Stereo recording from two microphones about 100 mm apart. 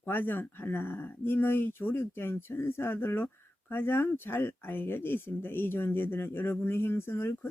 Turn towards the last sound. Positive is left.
turn(degrees=25)  # may be behind; listen again after turning